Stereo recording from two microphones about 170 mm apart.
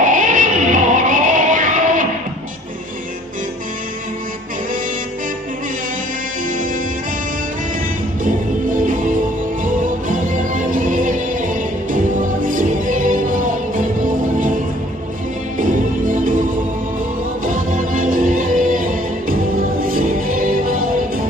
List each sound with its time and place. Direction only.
0.0 s music: 50° right (ahead or behind)
8.7 s music: 50° right (ahead or behind)
15.5 s music: 50° right (ahead or behind)
17.4 s music: 50° right (ahead or behind)